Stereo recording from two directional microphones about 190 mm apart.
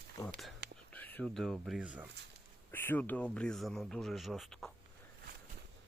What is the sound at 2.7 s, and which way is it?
Speech, 10° left (ahead or behind).